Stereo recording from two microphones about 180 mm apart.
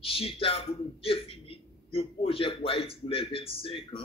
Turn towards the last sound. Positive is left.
turn(degrees=30)  # may be behind; listen again after turning